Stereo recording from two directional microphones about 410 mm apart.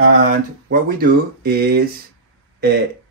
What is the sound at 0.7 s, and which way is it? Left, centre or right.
Speech, right.